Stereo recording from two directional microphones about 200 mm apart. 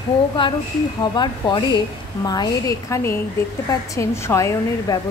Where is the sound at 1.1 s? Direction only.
20° left (ahead or behind).